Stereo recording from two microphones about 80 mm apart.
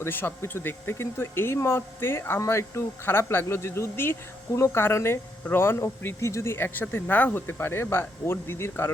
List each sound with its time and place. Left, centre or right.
0.0 s speech: left